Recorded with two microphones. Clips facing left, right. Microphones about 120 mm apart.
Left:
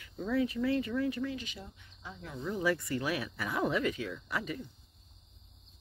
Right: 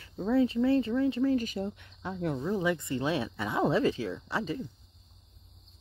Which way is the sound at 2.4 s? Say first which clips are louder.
Left 1 dB; 25° right (ahead or behind).